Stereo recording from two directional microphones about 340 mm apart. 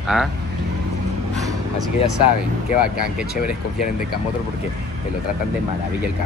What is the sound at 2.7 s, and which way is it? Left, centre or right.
Speech, left.